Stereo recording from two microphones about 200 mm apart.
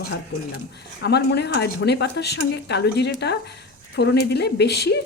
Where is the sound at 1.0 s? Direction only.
55° left (ahead or behind).